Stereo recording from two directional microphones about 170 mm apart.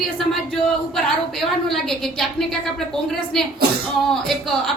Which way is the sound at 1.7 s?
Centre (ahead or behind).